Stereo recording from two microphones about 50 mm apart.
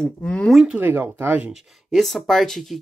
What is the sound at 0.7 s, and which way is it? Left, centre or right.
Speech, right.